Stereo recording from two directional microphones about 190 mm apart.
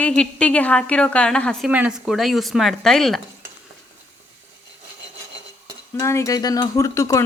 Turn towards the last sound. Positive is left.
turn(degrees=15)  # may be behind; listen again after turning